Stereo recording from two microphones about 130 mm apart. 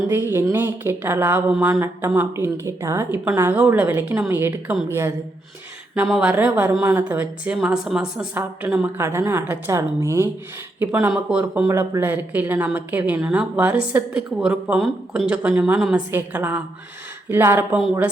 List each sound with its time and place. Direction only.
0.1 s a woman's voice: 15° right (ahead or behind)
6.1 s a woman's voice: 5° right (ahead or behind)